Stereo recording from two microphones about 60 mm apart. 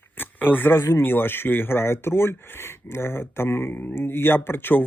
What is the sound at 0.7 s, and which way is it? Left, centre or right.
Speech, left.